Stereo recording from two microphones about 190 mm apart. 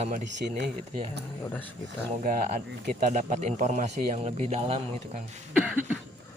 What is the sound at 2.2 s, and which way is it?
Speech, 45° right (ahead or behind).